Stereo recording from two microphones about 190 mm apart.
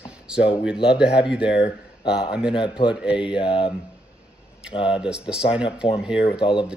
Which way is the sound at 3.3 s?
25° left (ahead or behind).